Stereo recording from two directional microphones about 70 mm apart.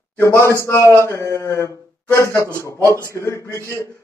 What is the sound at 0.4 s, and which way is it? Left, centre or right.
A man's voice, left.